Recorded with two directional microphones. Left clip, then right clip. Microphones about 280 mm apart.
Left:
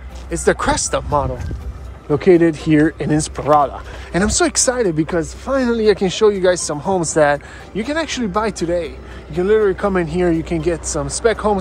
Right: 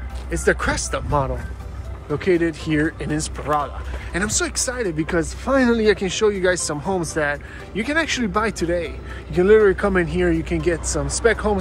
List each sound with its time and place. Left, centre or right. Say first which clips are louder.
0.3 s speech: left 4 dB; centre